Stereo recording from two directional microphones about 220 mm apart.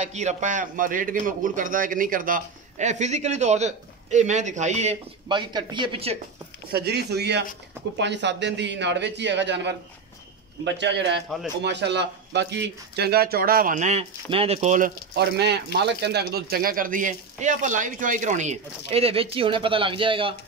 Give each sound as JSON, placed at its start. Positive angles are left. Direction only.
{"t": 0.0, "sound": "a man's voice", "side_deg": -30}
{"t": 6.7, "sound": "speech", "side_deg": -45}
{"t": 15.1, "sound": "a man's voice", "side_deg": -50}